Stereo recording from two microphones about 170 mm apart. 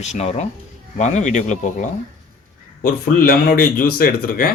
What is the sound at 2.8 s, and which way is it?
Speech, 60° left (ahead or behind).